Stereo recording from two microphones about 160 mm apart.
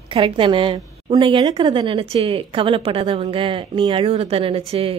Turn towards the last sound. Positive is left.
turn(degrees=-35)  # may be behind; listen again after turning